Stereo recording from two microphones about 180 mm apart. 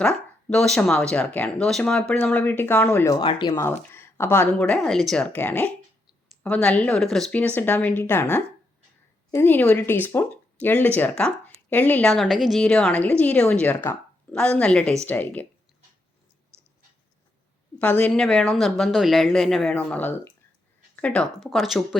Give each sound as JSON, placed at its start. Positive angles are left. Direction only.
{"t": 0.0, "sound": "a woman's voice", "side_deg": 5}
{"t": 3.2, "sound": "speech", "side_deg": 25}
{"t": 3.5, "sound": "a woman's voice", "side_deg": 10}
{"t": 17.7, "sound": "a woman's voice", "side_deg": 10}